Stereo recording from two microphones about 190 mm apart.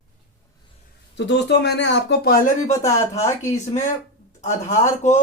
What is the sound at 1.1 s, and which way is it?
Speech, 65° left (ahead or behind).